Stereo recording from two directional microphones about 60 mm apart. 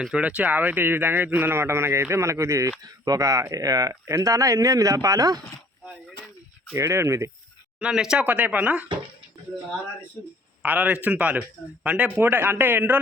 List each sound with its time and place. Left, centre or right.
0.1 s speech: right
1.6 s speech: right
2.8 s speech: right
4.0 s speech: right
6.7 s speech: right
7.8 s speech: centre
8.2 s speech: right
10.6 s speech: right
12.2 s speech: right